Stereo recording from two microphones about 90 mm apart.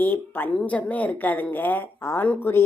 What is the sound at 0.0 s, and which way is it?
Speech, 20° left (ahead or behind).